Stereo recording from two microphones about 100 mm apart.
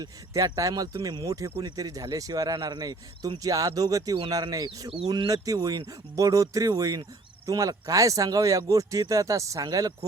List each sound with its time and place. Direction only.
0.0 s speech: 40° right (ahead or behind)